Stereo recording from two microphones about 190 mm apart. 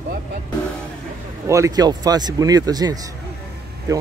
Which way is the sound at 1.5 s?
20° right (ahead or behind).